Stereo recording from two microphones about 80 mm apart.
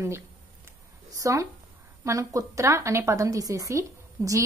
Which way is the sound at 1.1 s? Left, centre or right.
Right.